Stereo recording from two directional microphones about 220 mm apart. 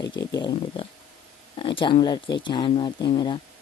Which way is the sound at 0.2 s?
15° left (ahead or behind).